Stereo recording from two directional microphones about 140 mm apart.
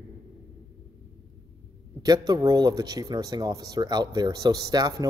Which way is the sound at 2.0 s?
30° right (ahead or behind).